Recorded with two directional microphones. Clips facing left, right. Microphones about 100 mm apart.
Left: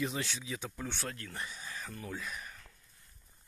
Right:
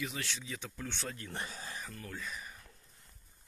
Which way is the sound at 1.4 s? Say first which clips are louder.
Left 2 dB; 35° right (ahead or behind).